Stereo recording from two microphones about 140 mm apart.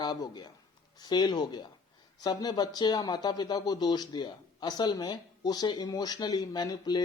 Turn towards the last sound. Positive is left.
turn(degrees=30)  # may be behind; listen again after turning